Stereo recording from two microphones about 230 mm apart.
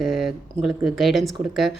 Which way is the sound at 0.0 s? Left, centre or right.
Centre.